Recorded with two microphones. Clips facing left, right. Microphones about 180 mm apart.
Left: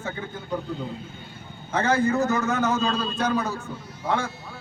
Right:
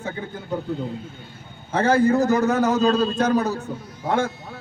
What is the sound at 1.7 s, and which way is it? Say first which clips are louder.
A man's voice: right 4 dB; 30° right (ahead or behind).